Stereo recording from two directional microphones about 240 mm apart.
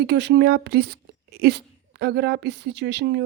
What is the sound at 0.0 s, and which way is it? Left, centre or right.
Speech, right.